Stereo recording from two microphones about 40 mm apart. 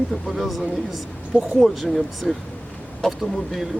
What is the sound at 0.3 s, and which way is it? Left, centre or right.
Speech, centre.